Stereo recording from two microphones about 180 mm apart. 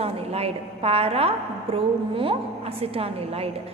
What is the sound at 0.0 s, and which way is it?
A woman's voice, 35° right (ahead or behind).